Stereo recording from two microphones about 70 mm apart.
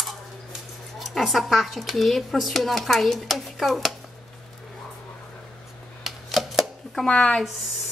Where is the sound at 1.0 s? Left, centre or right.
Centre.